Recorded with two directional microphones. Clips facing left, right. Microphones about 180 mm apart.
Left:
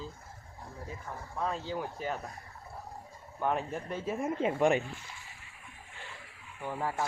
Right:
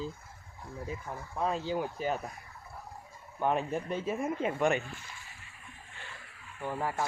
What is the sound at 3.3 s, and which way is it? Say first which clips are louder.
Speech: right 2 dB; 20° right (ahead or behind).